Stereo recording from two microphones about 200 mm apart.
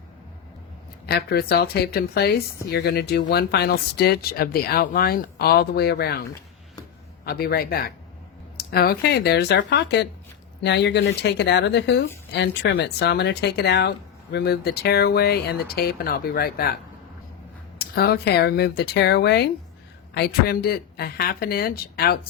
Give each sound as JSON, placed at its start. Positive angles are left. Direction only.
{"t": 1.0, "sound": "speech", "side_deg": 55}
{"t": 7.3, "sound": "speech", "side_deg": 50}
{"t": 17.7, "sound": "speech", "side_deg": 50}